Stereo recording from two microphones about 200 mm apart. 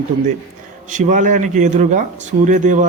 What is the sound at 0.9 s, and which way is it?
Speech, 40° right (ahead or behind).